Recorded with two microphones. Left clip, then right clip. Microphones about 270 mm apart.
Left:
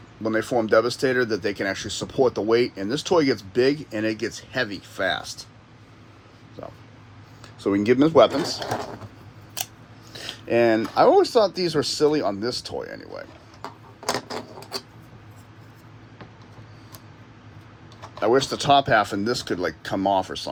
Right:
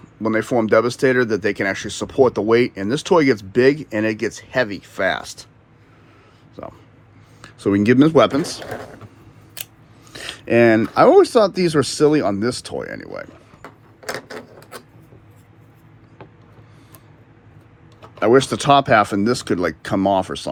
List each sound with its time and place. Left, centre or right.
0.3 s speech: right
7.4 s a sound: right
7.9 s speech: right
10.1 s speech: right
14.1 s a sound: centre
18.2 s speech: right